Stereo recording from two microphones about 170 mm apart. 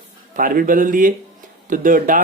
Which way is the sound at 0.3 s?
55° right (ahead or behind).